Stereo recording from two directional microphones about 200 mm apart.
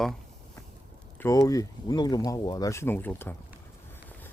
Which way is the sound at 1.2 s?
15° left (ahead or behind).